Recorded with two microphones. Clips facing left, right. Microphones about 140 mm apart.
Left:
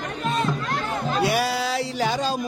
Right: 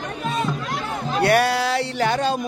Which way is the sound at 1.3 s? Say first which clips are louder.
Right 4 dB; centre (ahead or behind).